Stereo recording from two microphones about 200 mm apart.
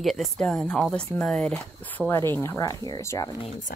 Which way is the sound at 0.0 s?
Centre (ahead or behind).